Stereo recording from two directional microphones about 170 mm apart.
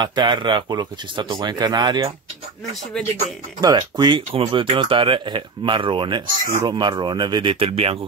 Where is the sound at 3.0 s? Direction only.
5° left (ahead or behind).